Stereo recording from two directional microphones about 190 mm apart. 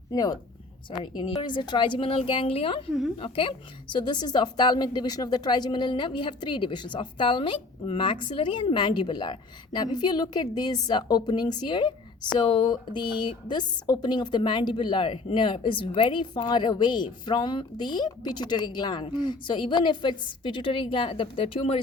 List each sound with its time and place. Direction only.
0.1 s speech: 20° left (ahead or behind)